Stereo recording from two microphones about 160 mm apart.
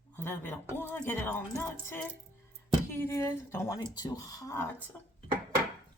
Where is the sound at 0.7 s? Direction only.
15° left (ahead or behind).